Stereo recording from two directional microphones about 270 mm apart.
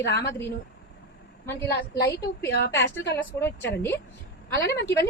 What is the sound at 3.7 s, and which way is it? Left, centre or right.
Speech, centre.